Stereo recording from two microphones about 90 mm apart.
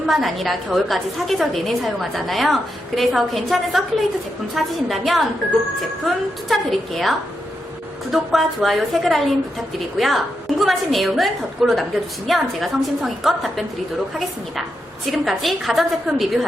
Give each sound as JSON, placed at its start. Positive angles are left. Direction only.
{"t": 0.0, "sound": "a woman's voice", "side_deg": 0}
{"t": 15.1, "sound": "a woman's voice", "side_deg": 0}